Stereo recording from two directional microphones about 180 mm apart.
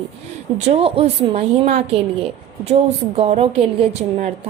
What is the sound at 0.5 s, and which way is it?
A woman's voice, 35° right (ahead or behind).